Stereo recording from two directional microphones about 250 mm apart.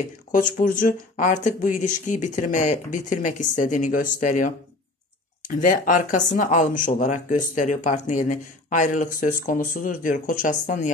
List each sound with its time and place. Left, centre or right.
0.3 s speech: left